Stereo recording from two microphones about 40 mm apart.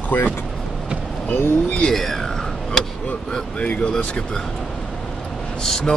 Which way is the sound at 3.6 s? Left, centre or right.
Left.